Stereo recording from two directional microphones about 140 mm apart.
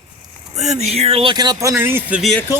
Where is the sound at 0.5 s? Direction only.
55° right (ahead or behind).